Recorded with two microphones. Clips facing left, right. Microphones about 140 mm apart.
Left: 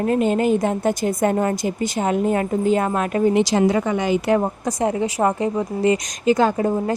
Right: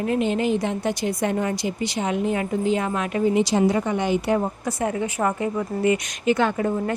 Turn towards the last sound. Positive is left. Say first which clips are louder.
# left 3 dB
turn(degrees=35)  # may be behind; listen again after turning